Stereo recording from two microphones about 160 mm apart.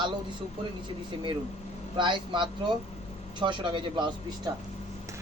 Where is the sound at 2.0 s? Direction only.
30° right (ahead or behind).